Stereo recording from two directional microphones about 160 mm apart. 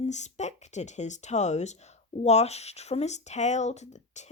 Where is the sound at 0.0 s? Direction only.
45° left (ahead or behind).